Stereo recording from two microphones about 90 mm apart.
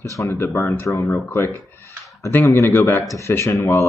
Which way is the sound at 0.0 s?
35° left (ahead or behind).